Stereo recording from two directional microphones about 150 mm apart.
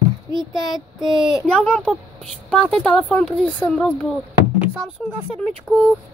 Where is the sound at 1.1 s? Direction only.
30° right (ahead or behind).